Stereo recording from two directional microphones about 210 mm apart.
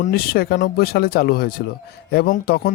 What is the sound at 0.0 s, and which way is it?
Speech, 45° left (ahead or behind).